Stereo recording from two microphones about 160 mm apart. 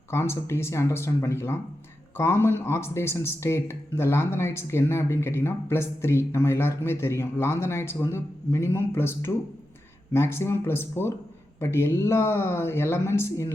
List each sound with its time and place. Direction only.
0.1 s speech: 15° left (ahead or behind)